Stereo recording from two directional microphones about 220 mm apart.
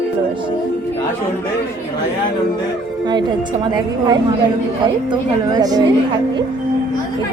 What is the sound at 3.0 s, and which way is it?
A woman's voice, 20° right (ahead or behind).